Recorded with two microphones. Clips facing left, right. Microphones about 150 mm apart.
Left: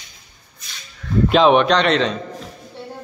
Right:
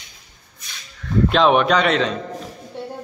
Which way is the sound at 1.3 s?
Centre (ahead or behind).